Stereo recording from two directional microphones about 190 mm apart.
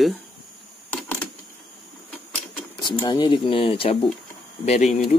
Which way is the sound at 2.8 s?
20° left (ahead or behind).